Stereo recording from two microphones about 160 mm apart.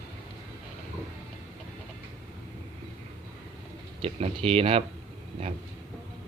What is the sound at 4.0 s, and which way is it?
Speech, 40° right (ahead or behind).